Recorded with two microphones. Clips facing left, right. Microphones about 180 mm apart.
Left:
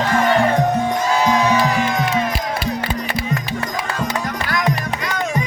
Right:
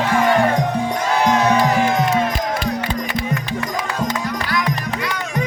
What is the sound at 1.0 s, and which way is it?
Music, 60° right (ahead or behind).